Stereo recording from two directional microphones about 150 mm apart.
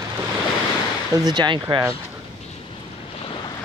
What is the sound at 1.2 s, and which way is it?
Speech, 30° right (ahead or behind).